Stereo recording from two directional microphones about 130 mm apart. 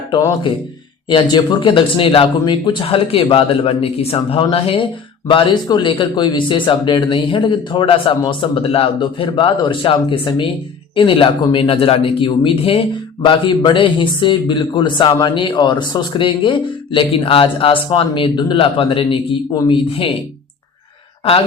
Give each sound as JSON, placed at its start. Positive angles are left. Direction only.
{"t": 0.1, "sound": "a man's voice", "side_deg": 40}